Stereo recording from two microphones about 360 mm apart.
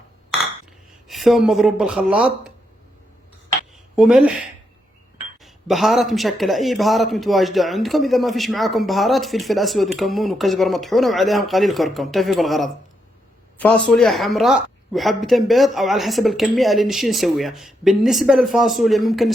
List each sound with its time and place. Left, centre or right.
1.0 s a man's voice: centre
3.9 s a man's voice: centre
5.4 s a man's voice: centre